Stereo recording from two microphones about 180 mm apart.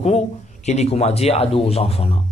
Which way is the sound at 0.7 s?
35° left (ahead or behind).